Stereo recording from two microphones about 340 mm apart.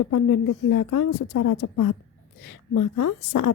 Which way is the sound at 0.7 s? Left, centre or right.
Left.